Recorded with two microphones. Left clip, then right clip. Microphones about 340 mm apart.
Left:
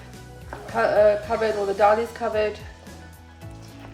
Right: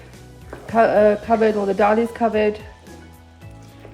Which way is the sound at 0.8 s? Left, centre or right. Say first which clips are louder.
Right 3 dB; right.